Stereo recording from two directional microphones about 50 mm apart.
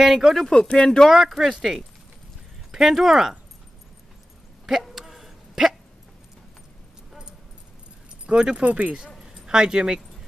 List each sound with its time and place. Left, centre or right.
0.0 s speech: centre
0.5 s speech: centre
1.0 s speech: centre
4.8 s a sound: centre
8.3 s speech: right
9.2 s keys jangling: centre